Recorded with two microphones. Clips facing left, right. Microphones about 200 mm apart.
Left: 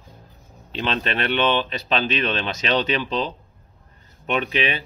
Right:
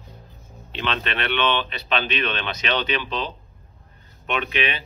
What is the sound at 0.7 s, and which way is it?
Speech, 40° left (ahead or behind).